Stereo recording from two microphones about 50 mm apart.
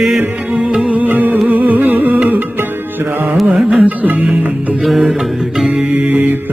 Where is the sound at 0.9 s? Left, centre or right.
Right.